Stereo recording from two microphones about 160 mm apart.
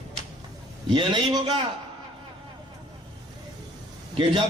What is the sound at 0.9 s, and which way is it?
Speech, 30° right (ahead or behind).